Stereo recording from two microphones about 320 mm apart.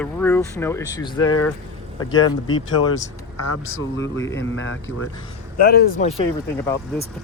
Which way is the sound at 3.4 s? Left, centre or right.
Left.